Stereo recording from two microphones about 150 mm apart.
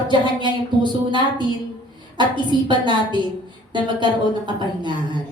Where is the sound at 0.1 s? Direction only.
30° right (ahead or behind).